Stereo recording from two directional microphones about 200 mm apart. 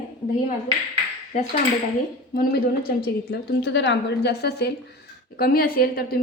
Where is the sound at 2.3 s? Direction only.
50° left (ahead or behind).